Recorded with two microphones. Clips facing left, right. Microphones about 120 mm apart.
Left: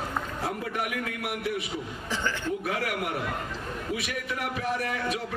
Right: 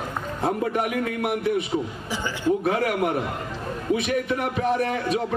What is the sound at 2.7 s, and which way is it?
A man's voice, 30° right (ahead or behind).